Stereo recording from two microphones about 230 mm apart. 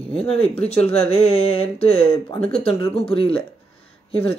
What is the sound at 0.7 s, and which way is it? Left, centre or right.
Speech, left.